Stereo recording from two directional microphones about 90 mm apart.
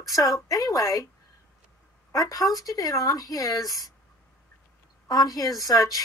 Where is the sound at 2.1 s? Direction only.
45° left (ahead or behind).